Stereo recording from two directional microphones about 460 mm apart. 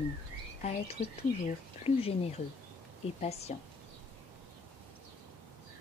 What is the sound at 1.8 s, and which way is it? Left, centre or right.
Speech, centre.